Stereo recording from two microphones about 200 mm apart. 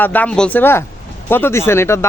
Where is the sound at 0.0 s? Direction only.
10° left (ahead or behind).